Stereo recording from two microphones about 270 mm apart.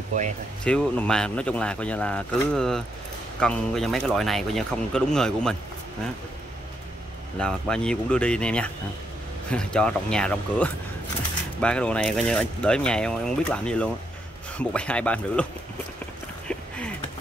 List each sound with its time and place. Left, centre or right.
0.1 s speech: right
0.7 s speech: centre
7.3 s speech: centre